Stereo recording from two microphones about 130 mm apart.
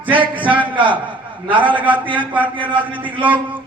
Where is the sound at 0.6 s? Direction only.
40° right (ahead or behind).